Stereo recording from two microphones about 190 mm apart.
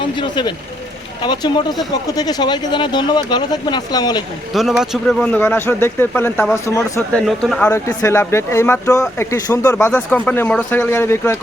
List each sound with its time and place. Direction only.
0.0 s speech: 25° left (ahead or behind)
4.8 s speech: centre (ahead or behind)
7.2 s speech: centre (ahead or behind)
7.7 s speech: 15° left (ahead or behind)